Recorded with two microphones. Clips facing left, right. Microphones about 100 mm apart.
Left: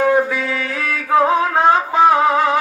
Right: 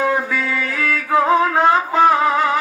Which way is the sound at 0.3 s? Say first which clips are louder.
Even; 20° left (ahead or behind).